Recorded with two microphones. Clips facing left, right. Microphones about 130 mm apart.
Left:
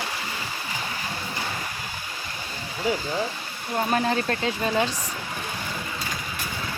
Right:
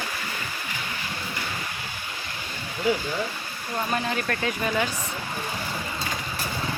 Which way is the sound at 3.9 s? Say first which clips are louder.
Left 4 dB; 30° left (ahead or behind).